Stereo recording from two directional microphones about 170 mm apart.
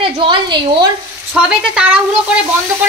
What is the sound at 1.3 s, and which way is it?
Speech, 5° right (ahead or behind).